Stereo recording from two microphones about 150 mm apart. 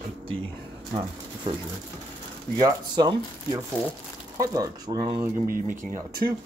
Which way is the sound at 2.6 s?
25° right (ahead or behind).